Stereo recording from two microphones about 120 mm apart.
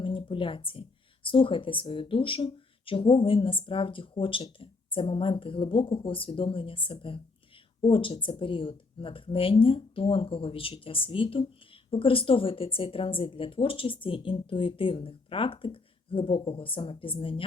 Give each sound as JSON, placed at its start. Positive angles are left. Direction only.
{"t": 0.0, "sound": "speech", "side_deg": 45}